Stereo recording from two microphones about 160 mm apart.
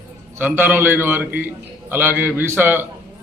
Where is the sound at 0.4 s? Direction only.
10° right (ahead or behind).